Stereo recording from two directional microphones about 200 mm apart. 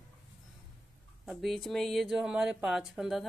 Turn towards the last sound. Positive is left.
turn(degrees=0)  # may be behind; listen again after turning